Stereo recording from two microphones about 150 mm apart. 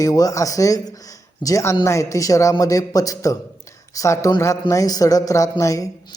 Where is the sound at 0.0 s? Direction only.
25° left (ahead or behind).